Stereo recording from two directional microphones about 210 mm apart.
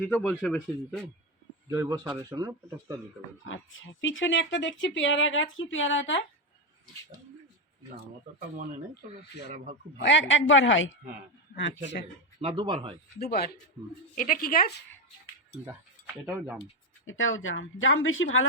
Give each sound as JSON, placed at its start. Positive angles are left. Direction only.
{"t": 0.0, "sound": "speech", "side_deg": 5}
{"t": 1.7, "sound": "speech", "side_deg": -15}
{"t": 3.4, "sound": "speech", "side_deg": 65}
{"t": 10.0, "sound": "speech", "side_deg": 60}
{"t": 12.4, "sound": "speech", "side_deg": -25}
{"t": 13.1, "sound": "speech", "side_deg": 50}
{"t": 16.2, "sound": "speech", "side_deg": -5}
{"t": 17.1, "sound": "speech", "side_deg": 70}